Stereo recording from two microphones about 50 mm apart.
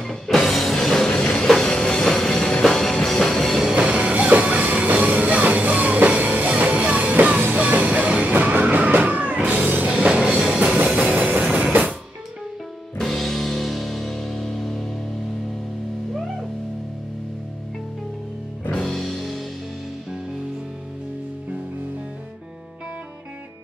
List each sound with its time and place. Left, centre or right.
0.0 s music: centre
3.7 s music: right
10.2 s music: centre
10.9 s a sound: centre
11.1 s music: right
11.5 s drum kit: right
12.9 s music: centre
18.8 s music: centre